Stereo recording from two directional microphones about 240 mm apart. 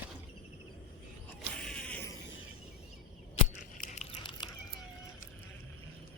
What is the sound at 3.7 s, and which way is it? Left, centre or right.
Tearing, left.